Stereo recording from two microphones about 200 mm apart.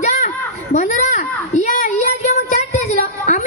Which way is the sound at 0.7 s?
35° left (ahead or behind).